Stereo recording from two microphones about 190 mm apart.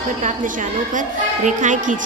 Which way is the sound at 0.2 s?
40° right (ahead or behind).